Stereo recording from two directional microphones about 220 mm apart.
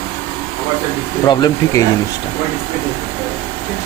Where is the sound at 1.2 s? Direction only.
15° left (ahead or behind).